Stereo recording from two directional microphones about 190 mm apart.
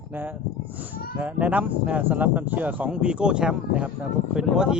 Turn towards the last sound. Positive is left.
turn(degrees=-5)  # may be behind; listen again after turning